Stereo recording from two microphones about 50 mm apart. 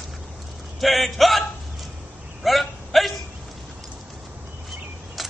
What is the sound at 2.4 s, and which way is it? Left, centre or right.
Hiccup, centre.